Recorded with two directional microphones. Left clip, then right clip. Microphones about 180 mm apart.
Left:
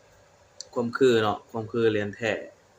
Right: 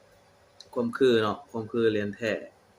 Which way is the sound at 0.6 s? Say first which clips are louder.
Left 2 dB; centre (ahead or behind).